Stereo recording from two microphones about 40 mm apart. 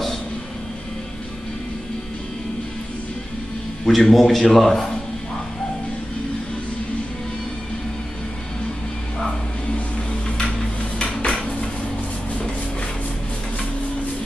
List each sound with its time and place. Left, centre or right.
3.8 s a man's voice: centre
9.8 s a sound: left
11.1 s dishes: centre